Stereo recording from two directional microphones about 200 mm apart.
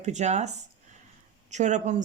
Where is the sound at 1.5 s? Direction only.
35° right (ahead or behind).